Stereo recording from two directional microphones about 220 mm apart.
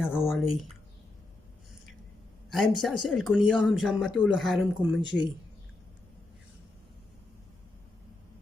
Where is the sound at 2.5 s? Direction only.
Centre (ahead or behind).